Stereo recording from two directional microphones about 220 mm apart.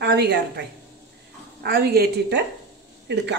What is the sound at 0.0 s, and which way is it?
A woman's voice, 45° right (ahead or behind).